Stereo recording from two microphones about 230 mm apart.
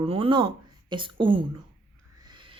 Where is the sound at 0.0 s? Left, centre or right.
Right.